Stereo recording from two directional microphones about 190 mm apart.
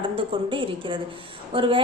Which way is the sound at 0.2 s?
25° right (ahead or behind).